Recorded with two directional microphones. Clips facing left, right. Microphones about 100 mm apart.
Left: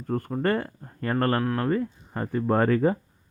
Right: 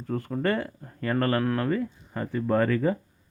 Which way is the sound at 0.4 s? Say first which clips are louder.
Left 1 dB; 40° left (ahead or behind).